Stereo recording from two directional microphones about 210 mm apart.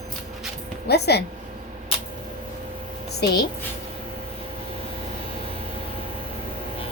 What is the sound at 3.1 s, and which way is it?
Speech, 50° left (ahead or behind).